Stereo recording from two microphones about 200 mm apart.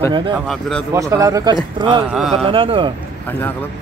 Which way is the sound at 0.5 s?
Centre (ahead or behind).